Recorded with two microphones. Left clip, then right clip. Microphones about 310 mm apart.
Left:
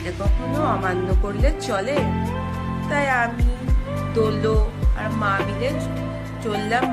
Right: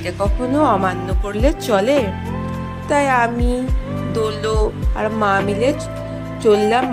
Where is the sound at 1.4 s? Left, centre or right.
Right.